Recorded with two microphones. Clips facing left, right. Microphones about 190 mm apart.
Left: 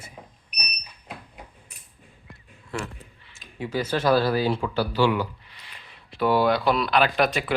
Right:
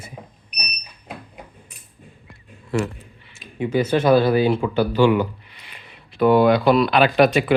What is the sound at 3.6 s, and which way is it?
Speech, 20° right (ahead or behind).